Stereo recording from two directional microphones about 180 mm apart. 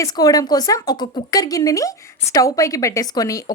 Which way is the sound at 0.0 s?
20° left (ahead or behind).